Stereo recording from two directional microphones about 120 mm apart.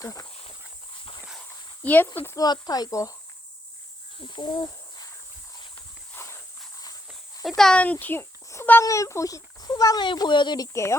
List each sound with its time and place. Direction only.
0.0 s speech: 30° left (ahead or behind)
1.8 s speech: 15° left (ahead or behind)
2.2 s speech: 30° left (ahead or behind)
4.2 s speech: 40° left (ahead or behind)
7.4 s speech: 5° left (ahead or behind); by 10.7 s 40° left (ahead or behind)
10.7 s speech: 25° left (ahead or behind)